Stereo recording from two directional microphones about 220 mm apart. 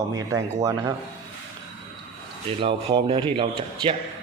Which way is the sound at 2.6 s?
25° right (ahead or behind).